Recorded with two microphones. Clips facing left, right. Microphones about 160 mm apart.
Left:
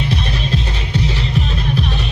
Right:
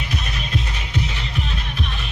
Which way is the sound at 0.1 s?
30° left (ahead or behind).